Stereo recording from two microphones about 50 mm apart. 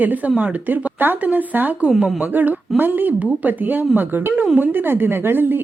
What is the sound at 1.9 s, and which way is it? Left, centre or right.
Speech, centre.